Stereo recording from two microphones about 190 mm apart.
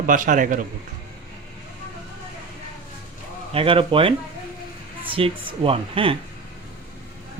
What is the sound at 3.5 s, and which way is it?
Speech, 30° right (ahead or behind).